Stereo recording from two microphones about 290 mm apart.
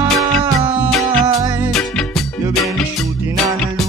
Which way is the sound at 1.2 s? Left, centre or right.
Centre.